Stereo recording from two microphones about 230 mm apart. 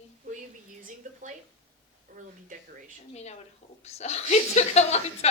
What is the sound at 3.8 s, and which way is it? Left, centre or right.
Speech, left.